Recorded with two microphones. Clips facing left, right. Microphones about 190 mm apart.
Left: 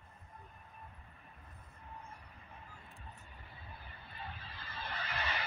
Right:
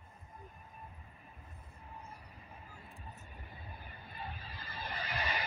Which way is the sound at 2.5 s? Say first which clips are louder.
Right 1 dB; 5° right (ahead or behind).